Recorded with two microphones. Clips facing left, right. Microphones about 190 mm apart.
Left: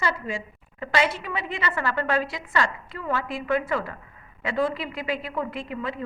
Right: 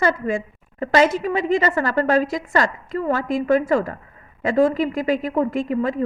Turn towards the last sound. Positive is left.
turn(degrees=-45)  # may be behind; listen again after turning